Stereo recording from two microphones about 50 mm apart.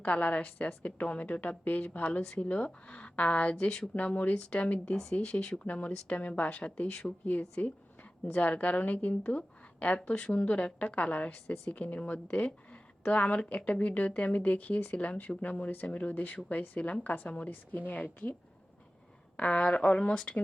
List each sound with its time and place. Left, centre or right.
0.0 s a woman's voice: left
3.6 s speech: centre
3.9 s a woman's voice: left
19.4 s a woman's voice: left